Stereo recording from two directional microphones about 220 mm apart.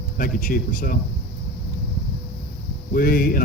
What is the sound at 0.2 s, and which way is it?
Speech, 40° left (ahead or behind).